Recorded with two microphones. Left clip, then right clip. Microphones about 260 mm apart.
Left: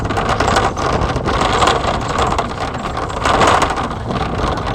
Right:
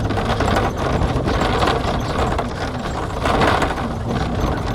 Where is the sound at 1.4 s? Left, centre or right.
Left.